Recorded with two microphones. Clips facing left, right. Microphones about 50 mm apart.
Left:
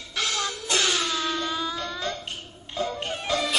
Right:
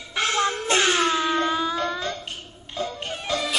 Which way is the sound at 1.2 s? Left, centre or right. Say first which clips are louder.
Right 5 dB; right.